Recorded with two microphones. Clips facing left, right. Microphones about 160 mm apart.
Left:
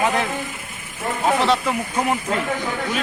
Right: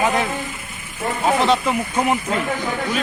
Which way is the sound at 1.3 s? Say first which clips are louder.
Right 1 dB; 15° right (ahead or behind).